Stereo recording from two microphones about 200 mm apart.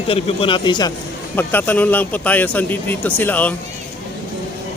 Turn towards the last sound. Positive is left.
turn(degrees=10)  # may be behind; listen again after turning